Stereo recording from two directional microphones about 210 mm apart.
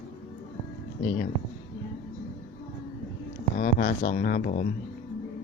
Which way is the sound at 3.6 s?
45° left (ahead or behind).